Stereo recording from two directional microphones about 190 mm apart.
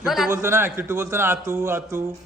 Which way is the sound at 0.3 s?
15° right (ahead or behind).